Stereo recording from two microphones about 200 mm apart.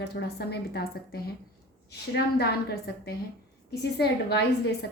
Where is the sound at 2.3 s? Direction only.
55° left (ahead or behind).